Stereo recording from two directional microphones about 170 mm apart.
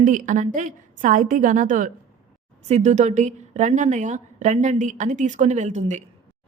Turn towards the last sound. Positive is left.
turn(degrees=-45)  # may be behind; listen again after turning